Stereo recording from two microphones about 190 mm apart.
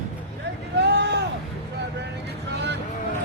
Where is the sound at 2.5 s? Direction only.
65° right (ahead or behind).